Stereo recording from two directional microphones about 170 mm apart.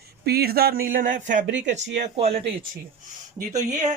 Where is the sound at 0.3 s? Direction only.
65° right (ahead or behind); by 2.4 s 40° right (ahead or behind).